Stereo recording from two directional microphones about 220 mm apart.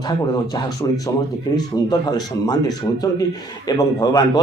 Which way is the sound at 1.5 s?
20° left (ahead or behind).